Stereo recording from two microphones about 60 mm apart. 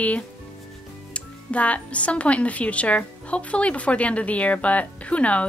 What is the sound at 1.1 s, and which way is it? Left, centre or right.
Speech, left.